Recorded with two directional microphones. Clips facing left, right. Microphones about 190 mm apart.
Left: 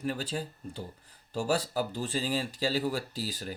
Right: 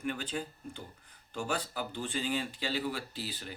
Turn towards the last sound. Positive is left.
turn(degrees=40)  # may be behind; listen again after turning